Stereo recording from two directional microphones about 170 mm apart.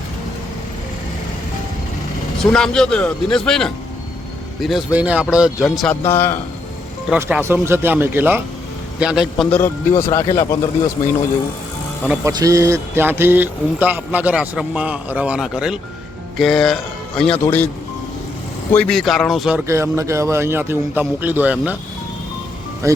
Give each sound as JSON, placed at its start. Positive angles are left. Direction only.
{"t": 2.4, "sound": "a man's voice", "side_deg": 5}
{"t": 7.2, "sound": "a man's voice", "side_deg": -10}
{"t": 9.5, "sound": "speech", "side_deg": 15}
{"t": 12.0, "sound": "speech", "side_deg": -5}
{"t": 12.3, "sound": "speech", "side_deg": -20}
{"t": 17.4, "sound": "speech", "side_deg": 15}
{"t": 18.7, "sound": "a man's voice", "side_deg": 5}
{"t": 19.6, "sound": "speech", "side_deg": -15}